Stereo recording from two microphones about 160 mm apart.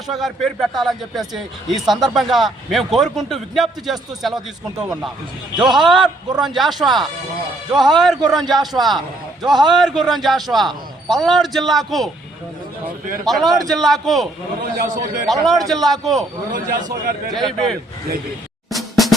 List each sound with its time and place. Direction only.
0.1 s a man's voice: centre (ahead or behind)
5.5 s a man's voice: centre (ahead or behind)
13.2 s a man's voice: centre (ahead or behind)
14.8 s speech: 55° right (ahead or behind)
15.3 s a man's voice: centre (ahead or behind)
16.5 s speech: 60° right (ahead or behind)
18.7 s drum: centre (ahead or behind)